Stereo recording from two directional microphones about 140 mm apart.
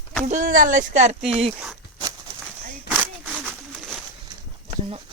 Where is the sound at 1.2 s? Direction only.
5° right (ahead or behind).